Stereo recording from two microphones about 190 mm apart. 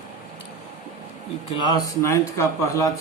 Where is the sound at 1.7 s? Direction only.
15° left (ahead or behind).